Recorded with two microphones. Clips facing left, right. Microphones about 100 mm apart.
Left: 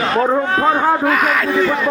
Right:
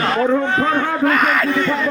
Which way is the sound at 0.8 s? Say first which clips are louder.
Left 4 dB; 35° left (ahead or behind).